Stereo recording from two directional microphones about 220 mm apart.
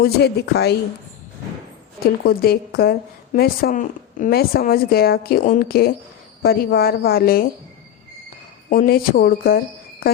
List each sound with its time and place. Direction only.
0.0 s speech: 45° left (ahead or behind)
2.2 s speech: 45° left (ahead or behind)
8.7 s speech: 40° left (ahead or behind)